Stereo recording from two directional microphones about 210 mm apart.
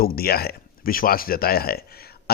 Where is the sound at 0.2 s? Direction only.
45° left (ahead or behind).